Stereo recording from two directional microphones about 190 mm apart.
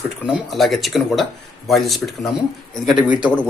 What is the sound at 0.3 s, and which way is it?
A man's voice, centre (ahead or behind).